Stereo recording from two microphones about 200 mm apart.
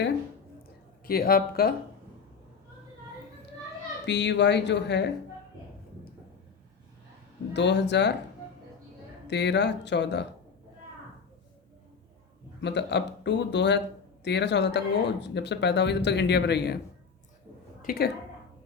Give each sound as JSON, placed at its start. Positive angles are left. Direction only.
{"t": 1.0, "sound": "speech", "side_deg": 50}
{"t": 4.0, "sound": "speech", "side_deg": 60}
{"t": 7.5, "sound": "speech", "side_deg": 60}
{"t": 9.2, "sound": "speech", "side_deg": 60}
{"t": 12.6, "sound": "speech", "side_deg": 60}
{"t": 17.8, "sound": "a woman's voice", "side_deg": 50}